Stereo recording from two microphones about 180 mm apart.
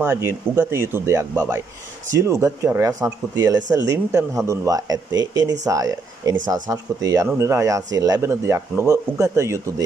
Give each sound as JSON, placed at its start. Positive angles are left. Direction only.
{"t": 0.0, "sound": "speech", "side_deg": -15}